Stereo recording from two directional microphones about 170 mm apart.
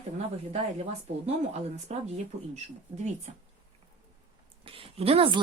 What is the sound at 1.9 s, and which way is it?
Speech, 40° right (ahead or behind).